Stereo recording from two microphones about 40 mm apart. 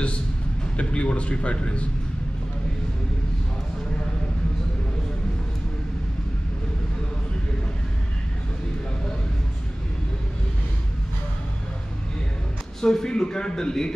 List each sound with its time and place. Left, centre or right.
0.7 s a man's voice: left
12.8 s a man's voice: centre